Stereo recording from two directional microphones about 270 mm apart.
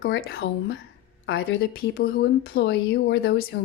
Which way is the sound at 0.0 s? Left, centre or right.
Left.